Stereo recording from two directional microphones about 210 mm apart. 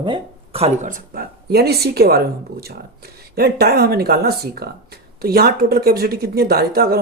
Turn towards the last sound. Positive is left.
turn(degrees=-45)  # may be behind; listen again after turning